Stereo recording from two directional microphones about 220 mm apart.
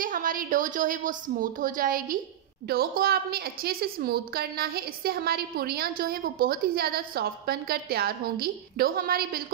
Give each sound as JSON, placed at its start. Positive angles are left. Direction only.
{"t": 0.0, "sound": "a woman's voice", "side_deg": -40}